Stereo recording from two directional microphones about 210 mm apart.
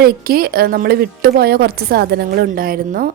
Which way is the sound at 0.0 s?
45° right (ahead or behind).